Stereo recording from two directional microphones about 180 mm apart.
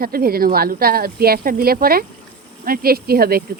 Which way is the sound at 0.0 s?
55° right (ahead or behind).